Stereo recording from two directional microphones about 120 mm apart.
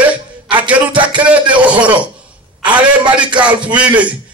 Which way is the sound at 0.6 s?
10° right (ahead or behind).